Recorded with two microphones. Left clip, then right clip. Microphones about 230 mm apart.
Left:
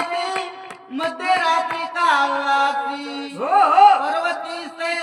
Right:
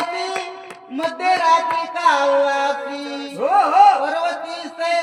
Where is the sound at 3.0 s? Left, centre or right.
Centre.